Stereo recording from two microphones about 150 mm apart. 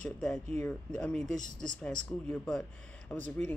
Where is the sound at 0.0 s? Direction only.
5° left (ahead or behind).